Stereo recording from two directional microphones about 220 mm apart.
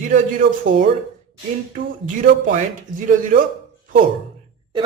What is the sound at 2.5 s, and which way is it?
Speech, 35° right (ahead or behind).